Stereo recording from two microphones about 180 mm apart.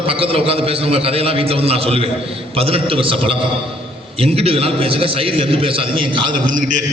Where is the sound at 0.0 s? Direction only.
30° right (ahead or behind).